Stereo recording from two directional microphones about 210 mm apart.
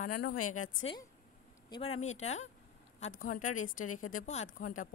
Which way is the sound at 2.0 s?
30° left (ahead or behind).